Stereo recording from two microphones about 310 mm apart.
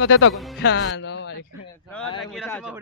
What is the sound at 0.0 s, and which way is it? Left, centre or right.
Speech, left.